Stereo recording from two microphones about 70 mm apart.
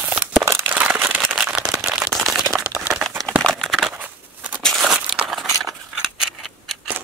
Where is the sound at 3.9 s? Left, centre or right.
Right.